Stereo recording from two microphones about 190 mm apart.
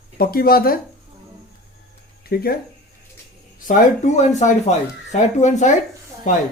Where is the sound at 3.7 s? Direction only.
40° left (ahead or behind).